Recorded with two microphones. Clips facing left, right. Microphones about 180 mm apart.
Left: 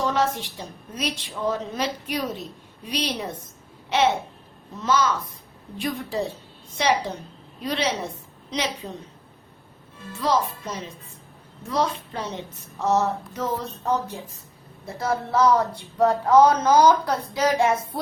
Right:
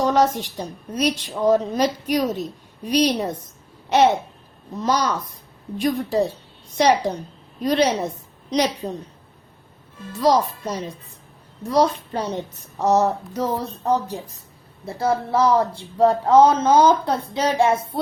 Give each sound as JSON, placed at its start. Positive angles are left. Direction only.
{"t": 0.0, "sound": "a woman's voice", "side_deg": -40}
{"t": 7.6, "sound": "a woman's voice", "side_deg": -40}
{"t": 10.1, "sound": "a woman's voice", "side_deg": -40}